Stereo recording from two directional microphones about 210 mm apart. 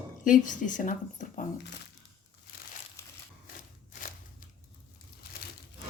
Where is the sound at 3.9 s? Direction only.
40° left (ahead or behind).